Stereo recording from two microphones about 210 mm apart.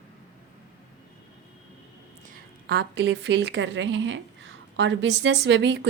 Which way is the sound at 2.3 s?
50° right (ahead or behind).